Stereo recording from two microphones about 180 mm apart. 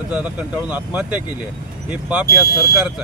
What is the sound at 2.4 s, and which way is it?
Speech, 60° left (ahead or behind).